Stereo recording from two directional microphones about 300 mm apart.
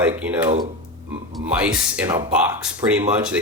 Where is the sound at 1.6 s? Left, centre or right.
Centre.